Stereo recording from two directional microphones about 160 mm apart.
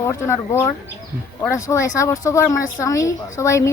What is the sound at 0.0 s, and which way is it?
A woman's voice, 15° left (ahead or behind).